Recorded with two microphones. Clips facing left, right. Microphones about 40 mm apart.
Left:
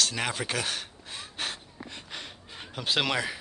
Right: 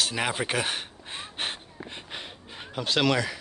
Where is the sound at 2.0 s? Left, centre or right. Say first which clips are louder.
Right 2 dB; centre.